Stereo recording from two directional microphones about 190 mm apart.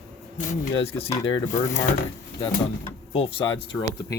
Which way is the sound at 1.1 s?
20° left (ahead or behind).